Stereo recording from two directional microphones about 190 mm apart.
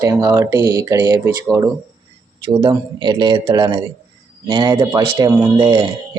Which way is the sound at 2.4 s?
25° right (ahead or behind).